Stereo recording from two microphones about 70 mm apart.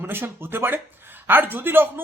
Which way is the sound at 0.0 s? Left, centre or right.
Right.